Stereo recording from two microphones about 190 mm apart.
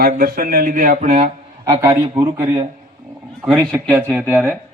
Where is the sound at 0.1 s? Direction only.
50° right (ahead or behind).